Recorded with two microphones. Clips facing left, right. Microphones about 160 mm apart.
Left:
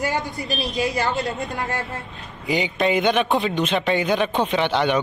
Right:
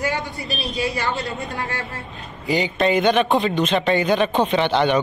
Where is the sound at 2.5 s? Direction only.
10° left (ahead or behind).